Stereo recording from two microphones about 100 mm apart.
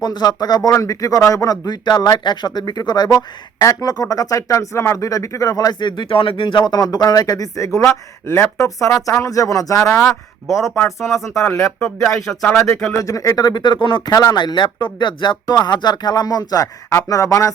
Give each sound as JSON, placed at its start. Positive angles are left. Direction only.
{"t": 0.0, "sound": "a man's voice", "side_deg": 45}
{"t": 11.1, "sound": "a man's voice", "side_deg": 30}